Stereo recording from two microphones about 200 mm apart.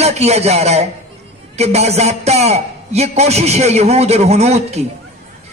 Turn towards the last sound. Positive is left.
turn(degrees=-30)  # may be behind; listen again after turning